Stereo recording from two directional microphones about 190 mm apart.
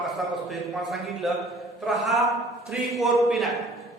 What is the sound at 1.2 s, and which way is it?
A man's voice, centre (ahead or behind).